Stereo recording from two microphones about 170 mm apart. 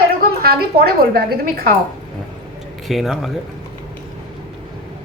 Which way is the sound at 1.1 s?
65° right (ahead or behind).